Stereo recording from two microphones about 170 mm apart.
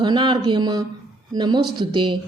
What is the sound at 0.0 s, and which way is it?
A woman's voice, 30° right (ahead or behind).